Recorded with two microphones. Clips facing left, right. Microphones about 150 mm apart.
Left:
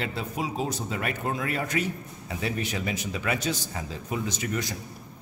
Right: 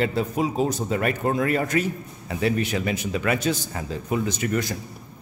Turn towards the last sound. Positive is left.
turn(degrees=-55)  # may be behind; listen again after turning